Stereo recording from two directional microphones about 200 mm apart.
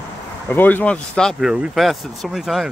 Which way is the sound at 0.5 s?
10° left (ahead or behind).